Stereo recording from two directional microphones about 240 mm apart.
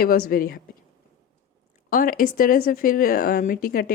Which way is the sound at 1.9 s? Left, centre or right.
Left.